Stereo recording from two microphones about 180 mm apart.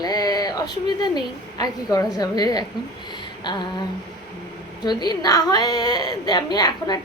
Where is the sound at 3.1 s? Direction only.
25° left (ahead or behind).